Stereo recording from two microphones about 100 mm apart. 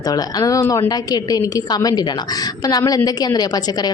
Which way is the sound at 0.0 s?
40° left (ahead or behind).